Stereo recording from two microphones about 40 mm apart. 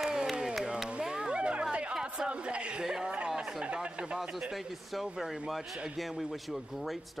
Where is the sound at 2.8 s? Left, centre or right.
Centre.